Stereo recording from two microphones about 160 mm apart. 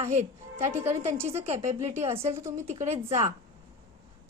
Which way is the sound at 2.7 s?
45° right (ahead or behind).